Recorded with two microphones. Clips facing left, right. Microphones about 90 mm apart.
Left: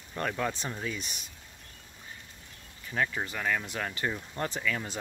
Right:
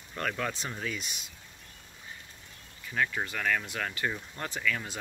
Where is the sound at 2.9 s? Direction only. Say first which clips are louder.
Even; 25° left (ahead or behind).